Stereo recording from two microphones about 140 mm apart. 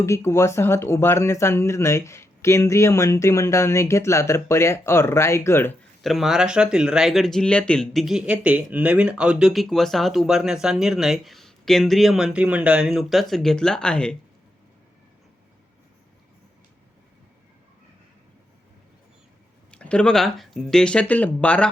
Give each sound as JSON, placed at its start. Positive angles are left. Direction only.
{"t": 0.0, "sound": "speech", "side_deg": 20}
{"t": 6.0, "sound": "speech", "side_deg": 0}
{"t": 19.7, "sound": "speech", "side_deg": 10}